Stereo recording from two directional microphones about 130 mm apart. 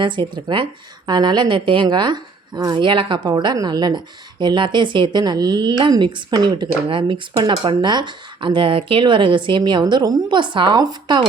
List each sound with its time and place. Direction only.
0.0 s speech: 35° right (ahead or behind)